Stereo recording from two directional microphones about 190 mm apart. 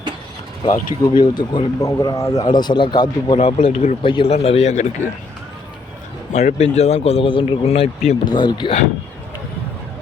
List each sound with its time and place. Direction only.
0.6 s speech: 25° left (ahead or behind)
6.3 s a man's voice: 35° left (ahead or behind)
8.2 s speech: 20° left (ahead or behind)